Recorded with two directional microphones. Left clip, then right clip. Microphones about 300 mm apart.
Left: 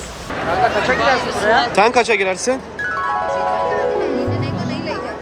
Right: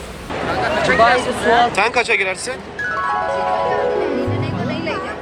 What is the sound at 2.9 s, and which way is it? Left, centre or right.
Music, centre.